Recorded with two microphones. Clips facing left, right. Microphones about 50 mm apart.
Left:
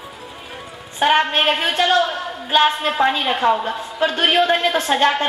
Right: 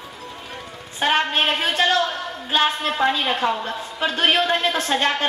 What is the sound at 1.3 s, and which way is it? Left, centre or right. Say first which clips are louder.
A woman's voice: left 3 dB; centre.